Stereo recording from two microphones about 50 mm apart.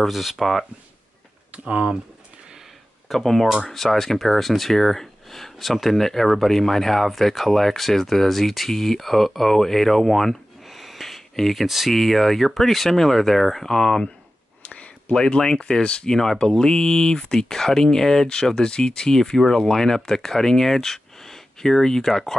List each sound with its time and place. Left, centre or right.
0.0 s speech: centre
1.5 s speech: right
3.1 s speech: centre
14.6 s a sound: left
15.1 s speech: centre